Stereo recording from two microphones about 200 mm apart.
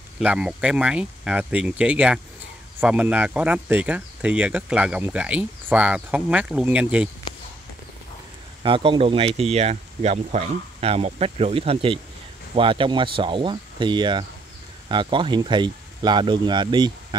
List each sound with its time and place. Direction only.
0.2 s speech: 5° right (ahead or behind)
8.6 s speech: 25° right (ahead or behind)